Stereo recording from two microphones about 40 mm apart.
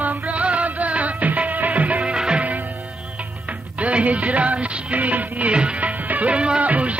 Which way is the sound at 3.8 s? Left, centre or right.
Right.